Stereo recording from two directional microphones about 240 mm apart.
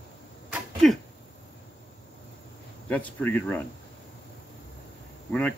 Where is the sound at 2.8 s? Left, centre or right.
Centre.